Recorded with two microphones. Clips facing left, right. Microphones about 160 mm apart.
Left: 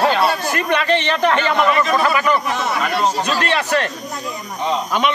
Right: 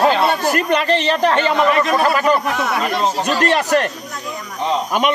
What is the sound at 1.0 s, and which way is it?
Speech, 35° right (ahead or behind).